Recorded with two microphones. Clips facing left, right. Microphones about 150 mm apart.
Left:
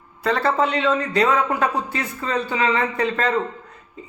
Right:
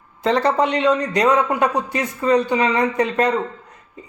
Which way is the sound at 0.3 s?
20° right (ahead or behind).